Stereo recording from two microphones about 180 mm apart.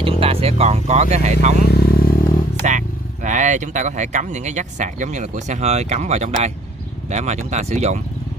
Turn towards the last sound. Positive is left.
turn(degrees=-40)  # may be behind; listen again after turning